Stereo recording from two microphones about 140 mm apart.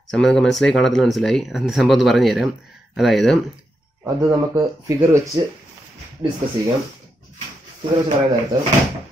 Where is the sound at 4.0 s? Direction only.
30° right (ahead or behind).